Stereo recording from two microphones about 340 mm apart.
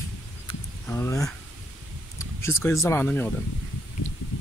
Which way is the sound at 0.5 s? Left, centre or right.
Centre.